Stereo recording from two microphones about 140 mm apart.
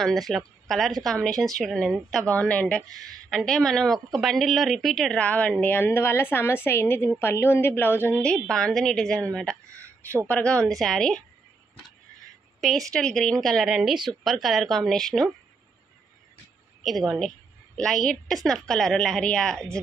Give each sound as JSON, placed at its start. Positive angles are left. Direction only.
{"t": 0.0, "sound": "a woman's voice", "side_deg": 0}
{"t": 9.7, "sound": "a sound", "side_deg": -20}
{"t": 10.2, "sound": "a woman's voice", "side_deg": 10}
{"t": 12.5, "sound": "speech", "side_deg": 0}
{"t": 16.8, "sound": "speech", "side_deg": 0}